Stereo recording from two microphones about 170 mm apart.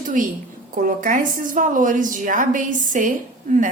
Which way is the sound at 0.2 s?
50° right (ahead or behind).